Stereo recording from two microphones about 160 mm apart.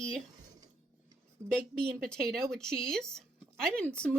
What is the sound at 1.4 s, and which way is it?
Speech, 20° right (ahead or behind).